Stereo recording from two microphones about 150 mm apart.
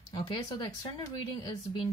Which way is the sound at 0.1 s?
30° left (ahead or behind).